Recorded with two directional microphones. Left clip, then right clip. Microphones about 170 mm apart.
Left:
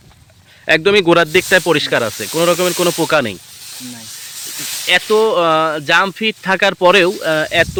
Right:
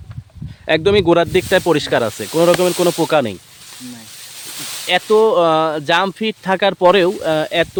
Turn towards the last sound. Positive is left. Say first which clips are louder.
# left 2 dB
turn(degrees=-10)  # may be behind; listen again after turning